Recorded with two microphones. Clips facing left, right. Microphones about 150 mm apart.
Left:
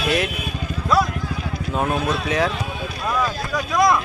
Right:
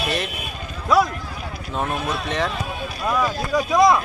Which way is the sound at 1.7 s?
5° left (ahead or behind).